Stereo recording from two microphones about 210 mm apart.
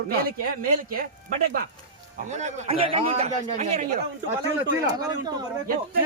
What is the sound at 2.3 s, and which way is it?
A man's voice, 35° right (ahead or behind).